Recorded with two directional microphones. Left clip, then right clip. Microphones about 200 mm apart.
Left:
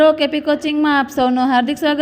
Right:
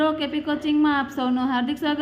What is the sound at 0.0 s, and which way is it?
A woman's voice, 35° left (ahead or behind).